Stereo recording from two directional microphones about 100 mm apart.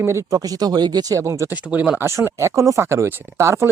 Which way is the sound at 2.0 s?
25° right (ahead or behind).